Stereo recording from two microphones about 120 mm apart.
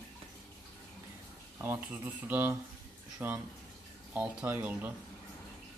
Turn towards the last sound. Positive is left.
turn(degrees=-15)  # may be behind; listen again after turning